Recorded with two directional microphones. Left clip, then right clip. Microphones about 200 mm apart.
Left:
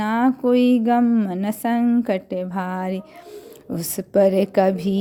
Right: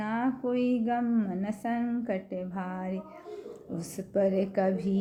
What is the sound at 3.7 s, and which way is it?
A woman's voice, 45° left (ahead or behind).